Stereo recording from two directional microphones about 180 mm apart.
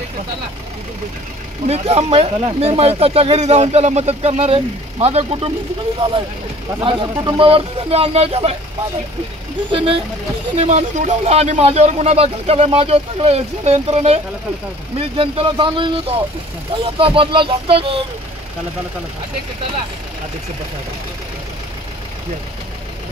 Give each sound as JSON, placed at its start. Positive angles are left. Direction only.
{"t": 1.7, "sound": "speech", "side_deg": -35}
{"t": 9.7, "sound": "speech", "side_deg": -30}